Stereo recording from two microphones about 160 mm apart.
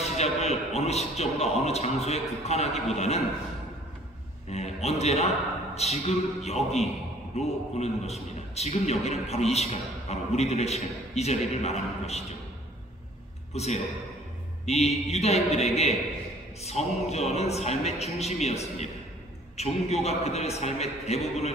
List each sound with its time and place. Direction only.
0.0 s a man's voice: 40° left (ahead or behind)
4.5 s a man's voice: 45° left (ahead or behind)
13.5 s a man's voice: 40° left (ahead or behind)